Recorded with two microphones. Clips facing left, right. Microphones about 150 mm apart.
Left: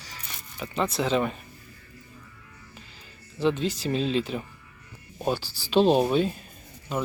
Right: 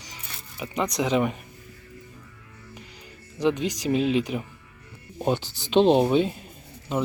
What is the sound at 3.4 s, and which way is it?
Speech, 15° right (ahead or behind).